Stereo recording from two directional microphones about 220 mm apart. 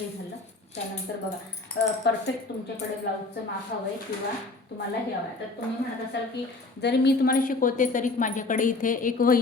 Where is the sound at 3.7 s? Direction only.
45° left (ahead or behind).